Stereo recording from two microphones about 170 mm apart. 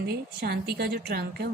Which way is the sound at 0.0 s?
70° right (ahead or behind).